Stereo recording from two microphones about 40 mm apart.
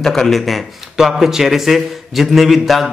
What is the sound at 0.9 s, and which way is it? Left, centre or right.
A man's voice, centre.